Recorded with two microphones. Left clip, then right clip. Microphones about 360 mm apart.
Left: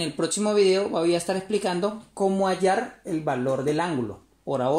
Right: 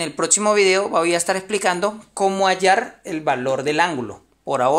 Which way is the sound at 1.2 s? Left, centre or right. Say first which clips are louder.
Right 6 dB; right.